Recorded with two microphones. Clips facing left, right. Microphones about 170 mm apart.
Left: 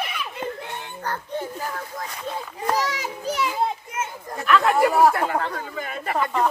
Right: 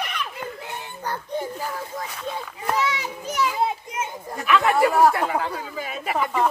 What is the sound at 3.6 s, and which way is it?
Children playing, 10° right (ahead or behind).